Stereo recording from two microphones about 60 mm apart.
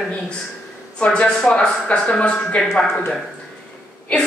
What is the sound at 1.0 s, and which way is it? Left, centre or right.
A woman's voice, centre.